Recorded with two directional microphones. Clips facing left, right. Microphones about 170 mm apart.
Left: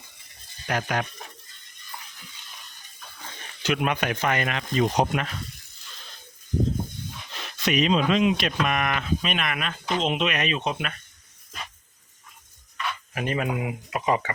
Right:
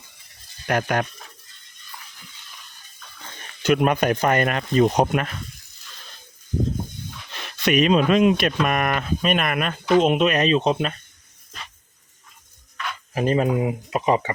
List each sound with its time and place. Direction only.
0.7 s speech: 50° right (ahead or behind)
3.6 s speech: 45° right (ahead or behind)
7.6 s speech: 55° right (ahead or behind); by 10.9 s 30° right (ahead or behind)
13.1 s speech: 35° right (ahead or behind)